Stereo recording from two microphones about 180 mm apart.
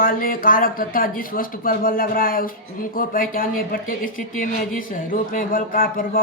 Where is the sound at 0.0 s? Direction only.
55° left (ahead or behind).